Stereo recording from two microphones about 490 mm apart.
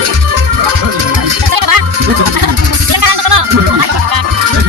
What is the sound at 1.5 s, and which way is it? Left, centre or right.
Music, right.